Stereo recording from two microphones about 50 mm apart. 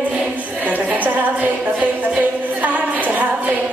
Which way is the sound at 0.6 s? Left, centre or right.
Right.